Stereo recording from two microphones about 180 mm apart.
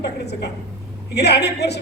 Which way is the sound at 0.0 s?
65° left (ahead or behind).